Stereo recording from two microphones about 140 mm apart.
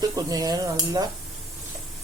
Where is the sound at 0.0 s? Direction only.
25° right (ahead or behind).